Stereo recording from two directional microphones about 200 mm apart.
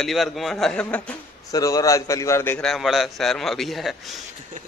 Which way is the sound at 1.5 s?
15° left (ahead or behind).